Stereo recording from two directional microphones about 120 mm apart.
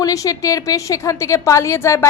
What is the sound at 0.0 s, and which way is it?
A woman's voice, 30° left (ahead or behind).